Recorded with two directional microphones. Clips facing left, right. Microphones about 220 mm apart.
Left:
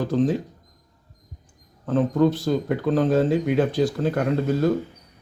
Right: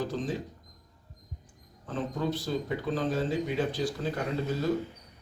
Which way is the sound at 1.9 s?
60° left (ahead or behind).